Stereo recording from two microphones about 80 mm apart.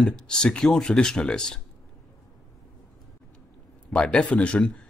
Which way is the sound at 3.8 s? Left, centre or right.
Centre.